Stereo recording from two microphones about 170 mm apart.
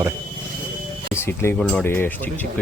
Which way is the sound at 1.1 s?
15° left (ahead or behind).